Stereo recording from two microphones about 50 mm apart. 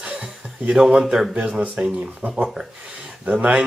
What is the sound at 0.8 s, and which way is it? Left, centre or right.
Speech, centre.